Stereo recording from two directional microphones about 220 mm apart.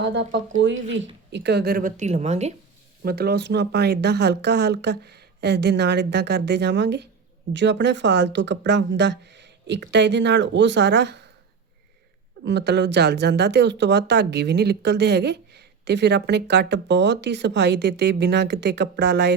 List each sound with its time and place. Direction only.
0.0 s a woman's voice: 55° right (ahead or behind); by 2.5 s 30° right (ahead or behind)
3.0 s speech: 45° right (ahead or behind)
12.5 s speech: 50° right (ahead or behind)